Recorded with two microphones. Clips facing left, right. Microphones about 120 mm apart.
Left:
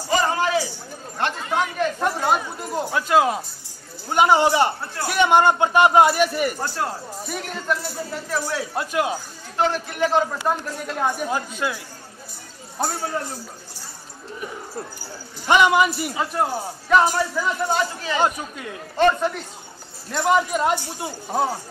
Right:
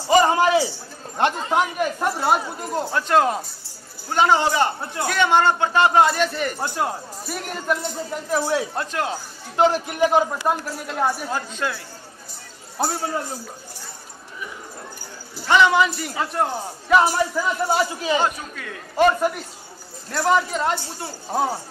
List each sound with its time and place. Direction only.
0.1 s speech: 20° right (ahead or behind)
2.6 s speech: 10° left (ahead or behind)
6.6 s a man's voice: 15° right (ahead or behind)
7.2 s speech: 5° right (ahead or behind)
8.3 s a man's voice: 15° right (ahead or behind)
8.7 s speech: 10° left (ahead or behind)
9.6 s a man's voice: 15° right (ahead or behind)
11.2 s speech: 15° left (ahead or behind)
15.4 s speech: 15° left (ahead or behind)
16.9 s a man's voice: 10° right (ahead or behind)
18.2 s speech: 20° left (ahead or behind)
18.9 s a man's voice: 10° right (ahead or behind)
20.5 s speech: 15° left (ahead or behind)
21.3 s speech: centre (ahead or behind)